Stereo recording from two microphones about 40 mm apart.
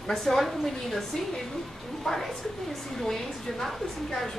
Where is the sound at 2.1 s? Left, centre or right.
Centre.